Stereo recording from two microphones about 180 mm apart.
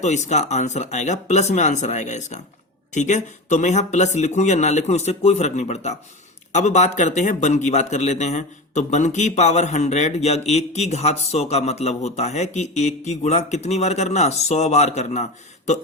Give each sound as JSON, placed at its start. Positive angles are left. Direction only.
{"t": 0.0, "sound": "a man's voice", "side_deg": 40}